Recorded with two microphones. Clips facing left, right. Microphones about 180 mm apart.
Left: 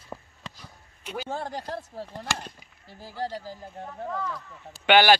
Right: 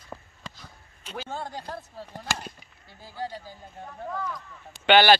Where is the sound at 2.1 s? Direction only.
5° right (ahead or behind).